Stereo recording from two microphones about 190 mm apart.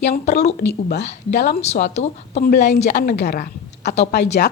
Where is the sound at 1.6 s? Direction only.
35° left (ahead or behind).